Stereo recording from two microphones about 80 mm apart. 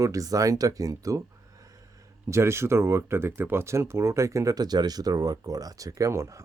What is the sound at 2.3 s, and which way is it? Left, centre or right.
Speech, right.